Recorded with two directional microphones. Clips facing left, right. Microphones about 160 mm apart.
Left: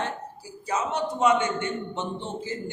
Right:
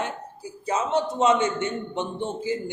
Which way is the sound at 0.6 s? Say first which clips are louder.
Right 3 dB; 25° right (ahead or behind).